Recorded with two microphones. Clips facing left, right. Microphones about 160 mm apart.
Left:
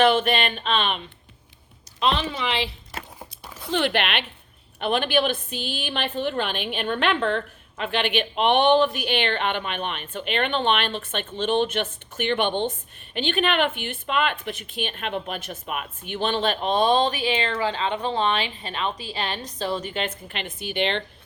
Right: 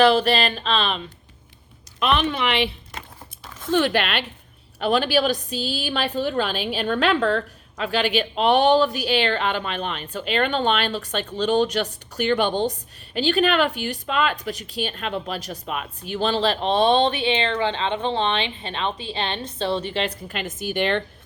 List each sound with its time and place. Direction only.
0.0 s a woman's voice: 35° right (ahead or behind)
2.0 s speech: 60° right (ahead or behind)
3.6 s a woman's voice: 45° right (ahead or behind)